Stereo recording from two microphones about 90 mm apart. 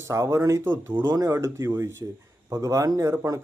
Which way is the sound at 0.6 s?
20° right (ahead or behind).